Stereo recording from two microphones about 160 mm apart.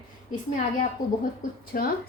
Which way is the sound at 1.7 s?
60° left (ahead or behind).